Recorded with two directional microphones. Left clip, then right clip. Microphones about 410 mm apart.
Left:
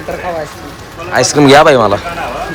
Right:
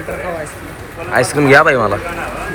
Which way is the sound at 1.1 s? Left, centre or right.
Centre.